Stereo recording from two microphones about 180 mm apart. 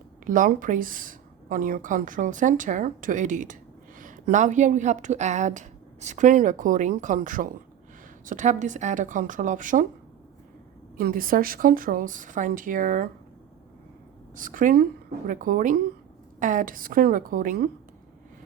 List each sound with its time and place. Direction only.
0.3 s a woman's voice: 45° right (ahead or behind)
10.9 s a woman's voice: 50° right (ahead or behind)
14.3 s a woman's voice: 50° right (ahead or behind)